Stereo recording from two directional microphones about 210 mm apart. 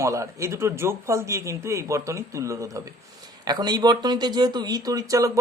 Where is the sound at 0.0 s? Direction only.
15° right (ahead or behind).